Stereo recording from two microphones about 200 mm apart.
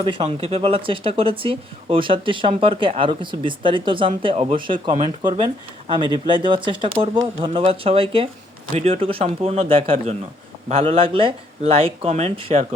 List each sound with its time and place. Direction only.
0.0 s speech: 25° right (ahead or behind)